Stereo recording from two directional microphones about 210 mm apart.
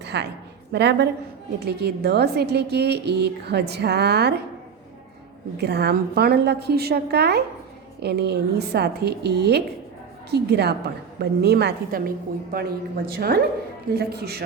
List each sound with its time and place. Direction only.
0.0 s a sound: 55° right (ahead or behind)
0.7 s a woman's voice: 55° right (ahead or behind)
5.5 s a woman's voice: 50° right (ahead or behind)